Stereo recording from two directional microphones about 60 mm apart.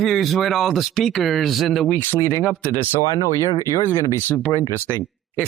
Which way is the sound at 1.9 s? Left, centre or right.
Left.